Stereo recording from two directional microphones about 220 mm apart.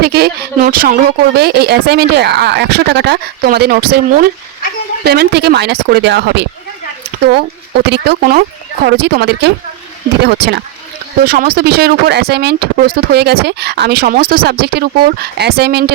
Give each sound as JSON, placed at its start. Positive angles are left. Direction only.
{"t": 0.0, "sound": "speech", "side_deg": -45}